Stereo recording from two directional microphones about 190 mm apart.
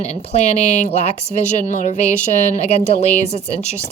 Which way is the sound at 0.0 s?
35° left (ahead or behind).